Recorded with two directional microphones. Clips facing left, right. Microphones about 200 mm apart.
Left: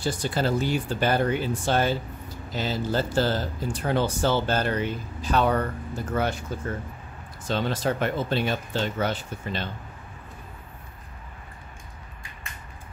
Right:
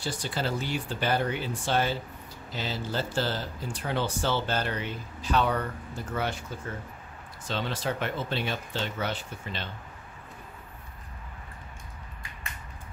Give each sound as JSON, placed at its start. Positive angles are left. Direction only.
{"t": 0.0, "sound": "speech", "side_deg": 45}
{"t": 7.4, "sound": "speech", "side_deg": 45}